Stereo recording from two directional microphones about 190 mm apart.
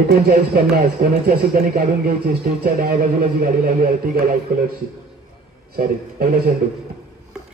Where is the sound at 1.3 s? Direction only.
50° right (ahead or behind).